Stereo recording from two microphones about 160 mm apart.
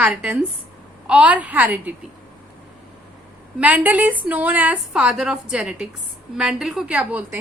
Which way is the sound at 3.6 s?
10° right (ahead or behind).